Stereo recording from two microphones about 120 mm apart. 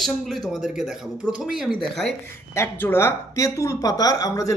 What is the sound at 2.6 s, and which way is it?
Speech, 20° left (ahead or behind).